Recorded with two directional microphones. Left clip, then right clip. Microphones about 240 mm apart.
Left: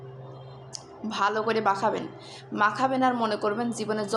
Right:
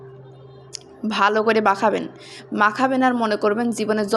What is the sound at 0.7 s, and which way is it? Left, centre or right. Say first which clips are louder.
A woman's voice: right 8 dB; right.